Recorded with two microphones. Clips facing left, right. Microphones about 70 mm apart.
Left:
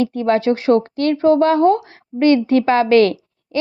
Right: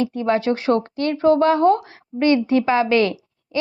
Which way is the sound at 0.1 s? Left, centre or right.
Left.